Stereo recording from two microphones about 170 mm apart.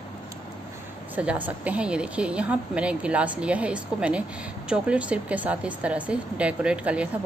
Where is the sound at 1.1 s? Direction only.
10° right (ahead or behind).